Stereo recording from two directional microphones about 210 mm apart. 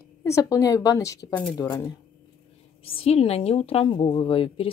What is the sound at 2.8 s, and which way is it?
A woman's voice, 30° left (ahead or behind).